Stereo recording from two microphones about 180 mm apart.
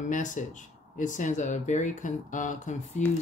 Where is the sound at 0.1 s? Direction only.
45° left (ahead or behind).